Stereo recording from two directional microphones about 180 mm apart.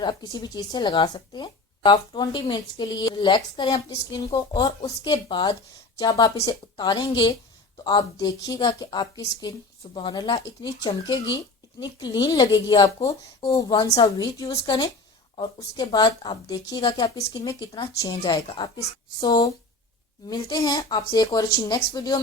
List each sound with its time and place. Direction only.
0.0 s speech: 25° left (ahead or behind)